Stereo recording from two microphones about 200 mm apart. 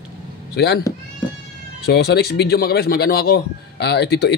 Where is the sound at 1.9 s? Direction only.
55° left (ahead or behind).